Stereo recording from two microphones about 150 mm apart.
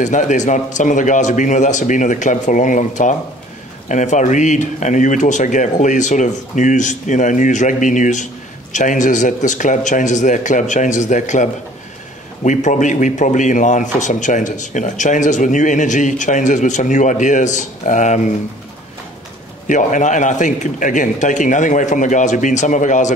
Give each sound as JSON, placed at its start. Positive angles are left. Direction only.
{"t": 0.0, "sound": "speech", "side_deg": 55}
{"t": 12.4, "sound": "speech", "side_deg": 55}
{"t": 19.7, "sound": "speech", "side_deg": 55}